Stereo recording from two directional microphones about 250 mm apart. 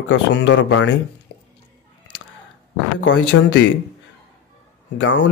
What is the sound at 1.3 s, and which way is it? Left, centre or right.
Drip, left.